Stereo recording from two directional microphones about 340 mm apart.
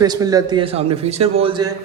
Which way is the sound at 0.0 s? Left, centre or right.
Centre.